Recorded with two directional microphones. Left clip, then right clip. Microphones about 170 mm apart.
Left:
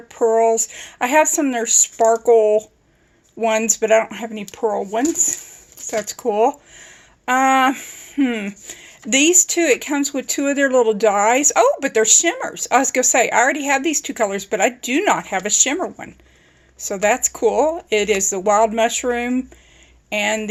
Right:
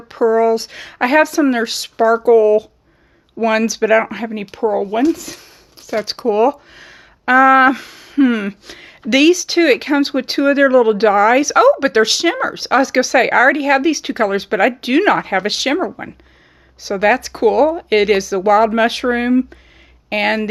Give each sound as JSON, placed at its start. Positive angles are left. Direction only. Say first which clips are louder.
{"t": 0.1, "sound": "speech", "louder": "right 2 dB", "side_deg": -40}